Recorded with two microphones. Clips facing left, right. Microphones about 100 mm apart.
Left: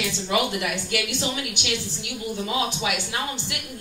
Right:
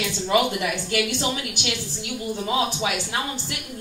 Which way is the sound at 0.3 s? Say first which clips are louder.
Right 3 dB; 45° right (ahead or behind).